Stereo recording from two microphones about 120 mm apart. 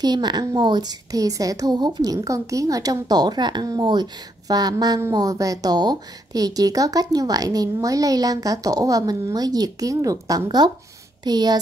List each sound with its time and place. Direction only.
0.0 s speech: 35° right (ahead or behind)